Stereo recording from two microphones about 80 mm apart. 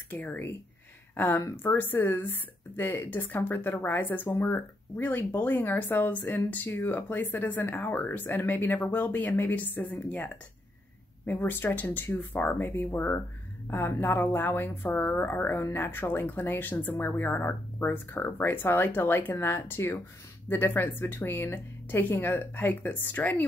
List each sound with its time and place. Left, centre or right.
0.1 s speech: left